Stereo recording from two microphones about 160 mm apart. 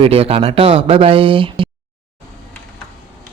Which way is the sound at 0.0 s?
35° right (ahead or behind).